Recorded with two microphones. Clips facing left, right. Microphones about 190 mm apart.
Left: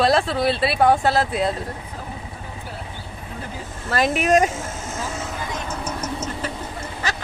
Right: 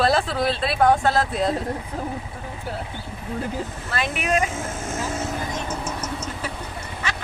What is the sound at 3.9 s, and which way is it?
Speech, 40° left (ahead or behind).